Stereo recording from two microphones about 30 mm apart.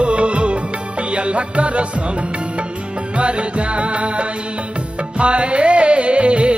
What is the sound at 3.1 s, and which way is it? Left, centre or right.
Music, right.